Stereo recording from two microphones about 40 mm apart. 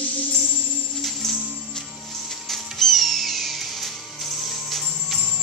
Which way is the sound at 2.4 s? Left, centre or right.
Centre.